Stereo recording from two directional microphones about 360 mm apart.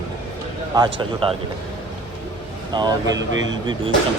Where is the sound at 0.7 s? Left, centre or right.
Centre.